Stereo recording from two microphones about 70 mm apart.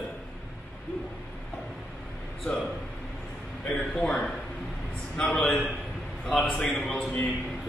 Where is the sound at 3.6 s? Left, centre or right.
Centre.